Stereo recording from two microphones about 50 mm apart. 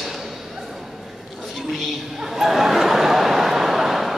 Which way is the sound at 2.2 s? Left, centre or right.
Centre.